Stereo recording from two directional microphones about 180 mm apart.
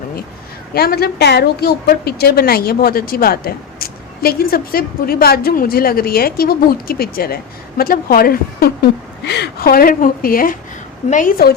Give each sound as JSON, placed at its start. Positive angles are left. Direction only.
{"t": 0.7, "sound": "a woman's voice", "side_deg": 60}